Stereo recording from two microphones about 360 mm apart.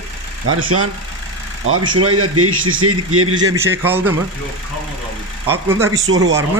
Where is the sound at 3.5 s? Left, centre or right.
Centre.